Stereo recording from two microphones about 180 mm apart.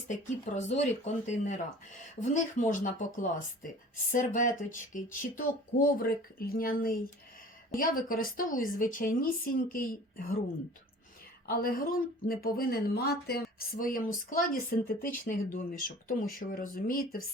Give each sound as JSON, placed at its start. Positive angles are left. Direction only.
{"t": 0.1, "sound": "speech", "side_deg": 40}
{"t": 11.4, "sound": "speech", "side_deg": 55}